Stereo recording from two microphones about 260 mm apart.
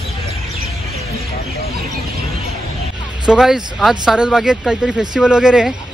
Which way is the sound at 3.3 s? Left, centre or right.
Centre.